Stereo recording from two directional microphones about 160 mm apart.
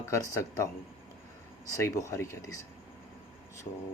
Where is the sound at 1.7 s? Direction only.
20° left (ahead or behind).